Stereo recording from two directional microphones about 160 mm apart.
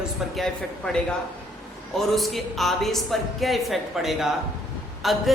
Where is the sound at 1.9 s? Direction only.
Centre (ahead or behind).